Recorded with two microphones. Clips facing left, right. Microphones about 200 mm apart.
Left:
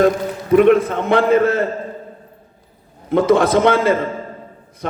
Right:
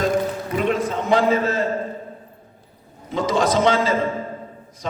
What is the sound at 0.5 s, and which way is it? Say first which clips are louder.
A man's voice: left 11 dB; 55° left (ahead or behind).